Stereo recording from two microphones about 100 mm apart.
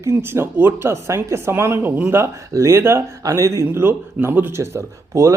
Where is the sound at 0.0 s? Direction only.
25° right (ahead or behind).